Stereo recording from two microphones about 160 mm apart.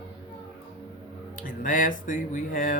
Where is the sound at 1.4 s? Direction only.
55° left (ahead or behind).